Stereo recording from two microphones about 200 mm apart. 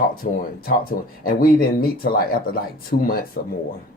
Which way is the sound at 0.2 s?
45° left (ahead or behind).